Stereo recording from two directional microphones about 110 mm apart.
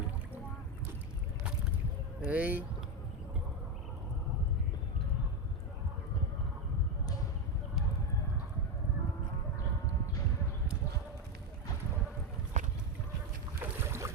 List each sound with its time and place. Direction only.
2.2 s speech: 15° right (ahead or behind)
12.6 s boat: 90° right
13.6 s boat: 25° right (ahead or behind)